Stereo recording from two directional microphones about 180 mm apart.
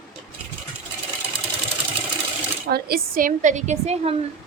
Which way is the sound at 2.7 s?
55° right (ahead or behind).